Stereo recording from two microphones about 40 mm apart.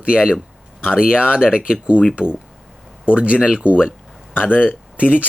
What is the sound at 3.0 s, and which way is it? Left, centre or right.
Speech, right.